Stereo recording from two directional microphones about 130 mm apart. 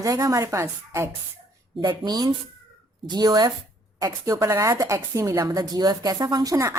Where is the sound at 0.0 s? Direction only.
25° right (ahead or behind).